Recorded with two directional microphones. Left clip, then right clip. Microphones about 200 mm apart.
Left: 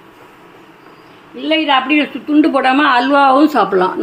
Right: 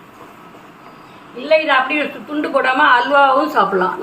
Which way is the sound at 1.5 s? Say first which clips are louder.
Even; 35° left (ahead or behind).